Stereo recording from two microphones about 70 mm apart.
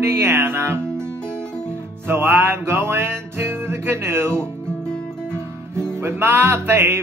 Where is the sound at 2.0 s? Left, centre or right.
Right.